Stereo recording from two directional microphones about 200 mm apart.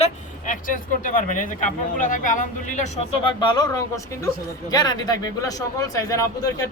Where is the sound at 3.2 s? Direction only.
25° left (ahead or behind).